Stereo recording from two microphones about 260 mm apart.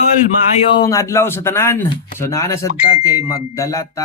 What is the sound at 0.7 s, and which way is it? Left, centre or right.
Speech, centre.